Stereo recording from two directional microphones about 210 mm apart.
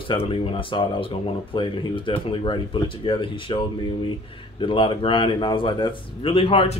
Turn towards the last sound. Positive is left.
turn(degrees=25)  # may be behind; listen again after turning